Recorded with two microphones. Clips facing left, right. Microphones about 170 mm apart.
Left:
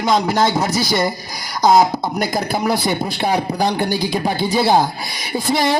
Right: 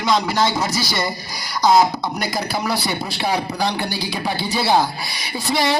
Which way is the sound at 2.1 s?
50° left (ahead or behind).